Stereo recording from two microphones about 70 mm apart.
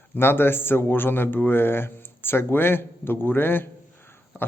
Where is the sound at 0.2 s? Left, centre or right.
Left.